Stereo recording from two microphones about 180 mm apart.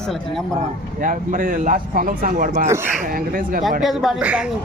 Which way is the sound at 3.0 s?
50° right (ahead or behind).